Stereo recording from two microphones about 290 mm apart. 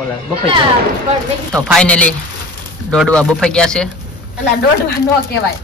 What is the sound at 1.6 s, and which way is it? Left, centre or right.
A man's voice, centre.